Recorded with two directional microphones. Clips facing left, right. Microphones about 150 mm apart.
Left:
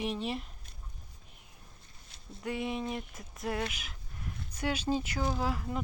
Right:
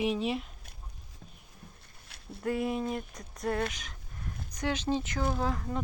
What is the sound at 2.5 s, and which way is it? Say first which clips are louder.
Speech: right 4 dB; centre (ahead or behind).